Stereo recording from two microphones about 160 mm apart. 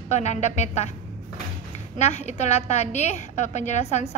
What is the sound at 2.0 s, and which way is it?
A woman's voice, 45° left (ahead or behind).